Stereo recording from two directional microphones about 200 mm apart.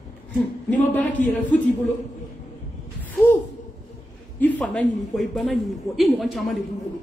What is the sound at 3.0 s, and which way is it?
Gasp, 10° left (ahead or behind).